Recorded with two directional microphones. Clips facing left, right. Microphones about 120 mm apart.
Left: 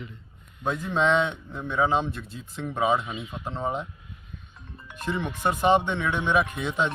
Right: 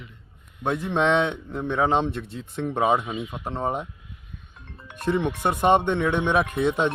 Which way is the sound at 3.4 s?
55° right (ahead or behind).